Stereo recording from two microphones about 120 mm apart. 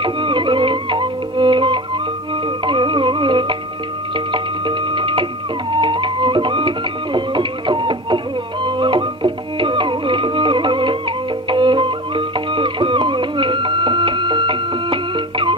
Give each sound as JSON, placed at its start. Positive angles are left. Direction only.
{"t": 0.0, "sound": "music", "side_deg": -40}